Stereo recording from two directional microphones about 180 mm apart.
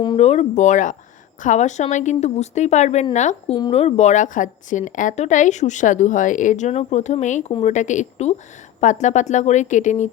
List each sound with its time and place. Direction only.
0.0 s a woman's voice: 30° left (ahead or behind)